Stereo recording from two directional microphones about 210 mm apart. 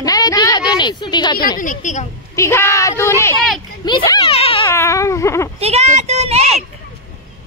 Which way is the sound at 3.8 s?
20° left (ahead or behind).